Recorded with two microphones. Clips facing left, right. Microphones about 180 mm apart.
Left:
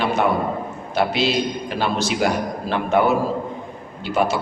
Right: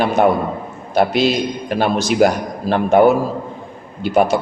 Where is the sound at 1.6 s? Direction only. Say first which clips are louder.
Right 5 dB; 50° right (ahead or behind).